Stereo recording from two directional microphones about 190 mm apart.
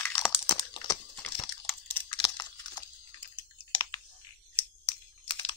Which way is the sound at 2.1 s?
20° left (ahead or behind).